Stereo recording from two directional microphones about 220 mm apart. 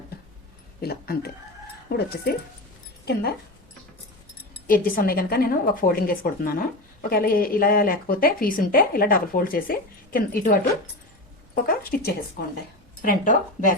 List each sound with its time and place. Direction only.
0.8 s a sound: 45° left (ahead or behind)
1.9 s a woman's voice: 45° left (ahead or behind)
4.6 s a woman's voice: 40° left (ahead or behind)